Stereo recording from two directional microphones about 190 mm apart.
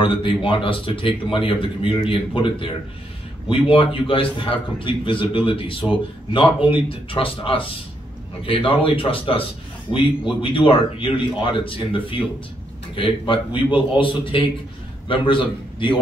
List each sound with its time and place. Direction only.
0.0 s a man's voice: 25° left (ahead or behind)